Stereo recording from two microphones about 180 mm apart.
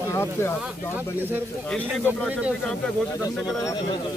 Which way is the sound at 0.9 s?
10° right (ahead or behind).